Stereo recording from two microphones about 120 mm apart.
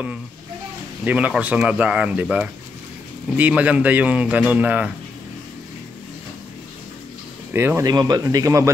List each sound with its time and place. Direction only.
1.0 s speech: 10° right (ahead or behind)
7.5 s speech: 20° right (ahead or behind)
7.8 s speech: 35° right (ahead or behind)